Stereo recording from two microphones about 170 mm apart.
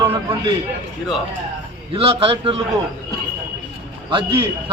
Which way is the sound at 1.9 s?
35° right (ahead or behind).